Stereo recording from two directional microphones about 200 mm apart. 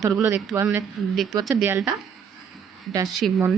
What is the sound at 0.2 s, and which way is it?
Speech, 10° right (ahead or behind).